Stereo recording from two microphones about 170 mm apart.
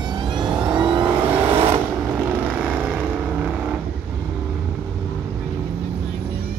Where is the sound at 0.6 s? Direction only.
25° right (ahead or behind).